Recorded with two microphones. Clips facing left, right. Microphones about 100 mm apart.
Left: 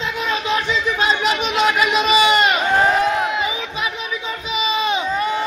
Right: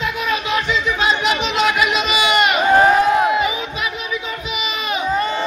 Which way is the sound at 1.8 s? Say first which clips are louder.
Left 2 dB; 35° left (ahead or behind).